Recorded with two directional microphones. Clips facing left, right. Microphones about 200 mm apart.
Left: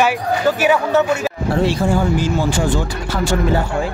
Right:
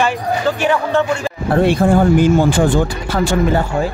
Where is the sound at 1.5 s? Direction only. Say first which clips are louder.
Right 5 dB; 55° right (ahead or behind).